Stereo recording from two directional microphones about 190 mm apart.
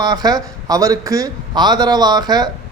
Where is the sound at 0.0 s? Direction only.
20° right (ahead or behind).